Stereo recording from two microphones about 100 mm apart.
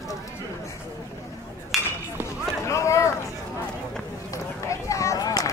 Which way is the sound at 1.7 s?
Centre (ahead or behind).